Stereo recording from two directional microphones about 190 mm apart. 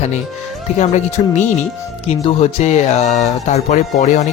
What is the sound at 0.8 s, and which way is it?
Speech, 35° left (ahead or behind).